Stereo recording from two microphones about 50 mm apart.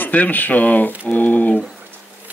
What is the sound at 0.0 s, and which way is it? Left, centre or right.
Speech, left.